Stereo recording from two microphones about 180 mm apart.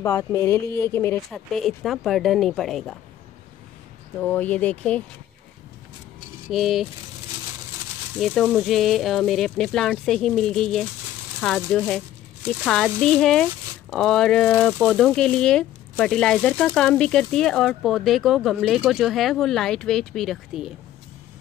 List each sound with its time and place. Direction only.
0.0 s speech: 15° left (ahead or behind)
1.3 s speech: centre (ahead or behind)
4.2 s speech: 10° left (ahead or behind)
6.5 s speech: centre (ahead or behind)
8.2 s speech: centre (ahead or behind)